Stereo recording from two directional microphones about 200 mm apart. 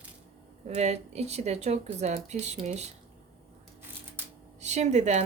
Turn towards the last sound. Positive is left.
turn(degrees=-35)  # may be behind; listen again after turning